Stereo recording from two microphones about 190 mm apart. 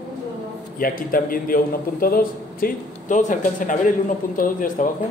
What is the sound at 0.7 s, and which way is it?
Speech, 45° left (ahead or behind).